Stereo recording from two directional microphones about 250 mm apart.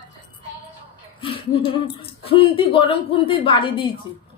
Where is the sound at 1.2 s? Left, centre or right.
Left.